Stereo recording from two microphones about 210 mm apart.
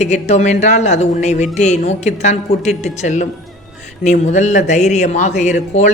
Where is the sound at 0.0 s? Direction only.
30° left (ahead or behind).